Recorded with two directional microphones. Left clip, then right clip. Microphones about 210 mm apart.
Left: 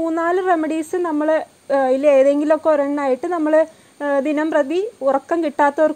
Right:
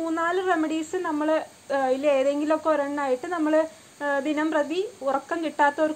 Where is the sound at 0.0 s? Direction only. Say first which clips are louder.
Left 6 dB; 45° left (ahead or behind).